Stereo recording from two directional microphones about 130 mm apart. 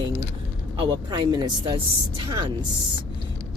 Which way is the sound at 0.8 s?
40° right (ahead or behind).